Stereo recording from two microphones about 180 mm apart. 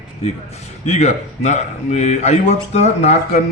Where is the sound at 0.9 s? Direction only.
40° left (ahead or behind).